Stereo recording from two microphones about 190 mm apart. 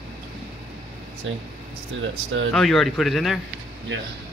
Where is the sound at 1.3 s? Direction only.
90° right.